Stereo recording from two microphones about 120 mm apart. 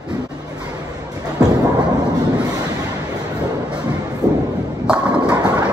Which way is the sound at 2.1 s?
35° right (ahead or behind).